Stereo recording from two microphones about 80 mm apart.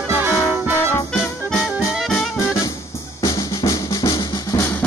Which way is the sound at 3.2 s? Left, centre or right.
Left.